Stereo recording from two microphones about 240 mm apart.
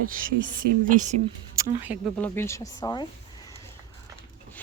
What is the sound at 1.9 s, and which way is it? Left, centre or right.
Speech, centre.